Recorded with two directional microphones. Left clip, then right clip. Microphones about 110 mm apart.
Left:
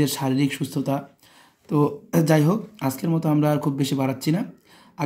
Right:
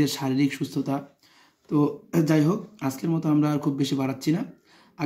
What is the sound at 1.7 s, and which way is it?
A man's voice, 45° left (ahead or behind).